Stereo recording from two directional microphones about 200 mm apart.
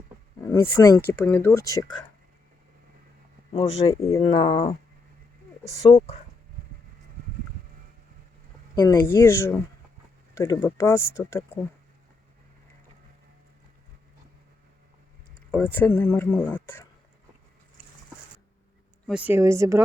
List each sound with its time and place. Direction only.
0.4 s speech: 15° left (ahead or behind)
3.5 s speech: 30° left (ahead or behind)
8.7 s speech: 20° left (ahead or behind)
15.5 s speech: 10° left (ahead or behind)
19.0 s a woman's voice: 5° right (ahead or behind)